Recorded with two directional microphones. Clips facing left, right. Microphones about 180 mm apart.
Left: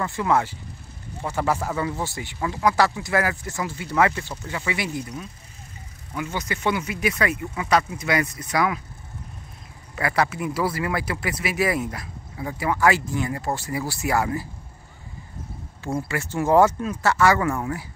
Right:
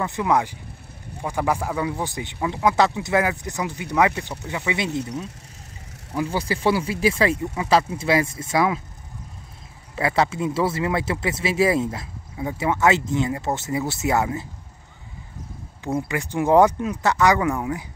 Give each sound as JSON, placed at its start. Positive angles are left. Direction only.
{"t": 0.0, "sound": "speech", "side_deg": -15}
{"t": 6.1, "sound": "speech", "side_deg": -30}
{"t": 9.9, "sound": "speech", "side_deg": -25}
{"t": 16.1, "sound": "speech", "side_deg": -15}